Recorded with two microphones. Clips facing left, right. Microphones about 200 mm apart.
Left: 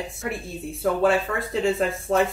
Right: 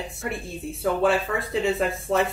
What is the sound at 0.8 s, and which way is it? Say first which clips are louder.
Music: left 1 dB; centre (ahead or behind).